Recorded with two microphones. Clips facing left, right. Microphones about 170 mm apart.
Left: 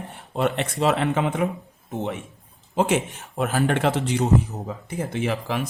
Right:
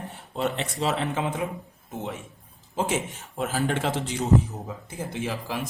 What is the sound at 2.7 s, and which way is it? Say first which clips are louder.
A man's voice: left 5 dB; 65° left (ahead or behind).